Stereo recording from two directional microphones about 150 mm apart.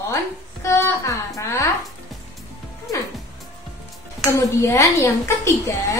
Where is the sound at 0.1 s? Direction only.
20° left (ahead or behind).